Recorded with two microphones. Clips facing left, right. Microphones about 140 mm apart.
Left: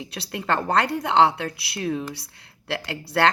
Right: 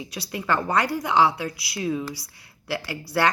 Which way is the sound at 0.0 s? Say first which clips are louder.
Even; 65° left (ahead or behind).